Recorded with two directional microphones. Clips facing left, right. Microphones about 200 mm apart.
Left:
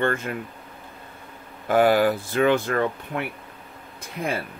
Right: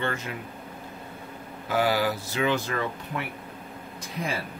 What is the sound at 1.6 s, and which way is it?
Speech, 55° left (ahead or behind).